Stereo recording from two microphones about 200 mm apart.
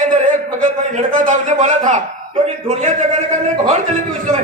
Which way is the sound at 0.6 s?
40° right (ahead or behind).